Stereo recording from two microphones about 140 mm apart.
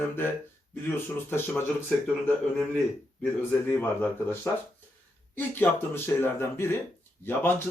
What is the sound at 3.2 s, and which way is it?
Speech, 15° left (ahead or behind).